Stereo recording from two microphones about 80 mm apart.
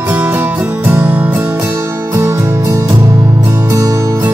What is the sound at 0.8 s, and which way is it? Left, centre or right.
Music, right.